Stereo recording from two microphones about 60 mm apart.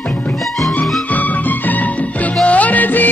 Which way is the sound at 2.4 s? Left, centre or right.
Left.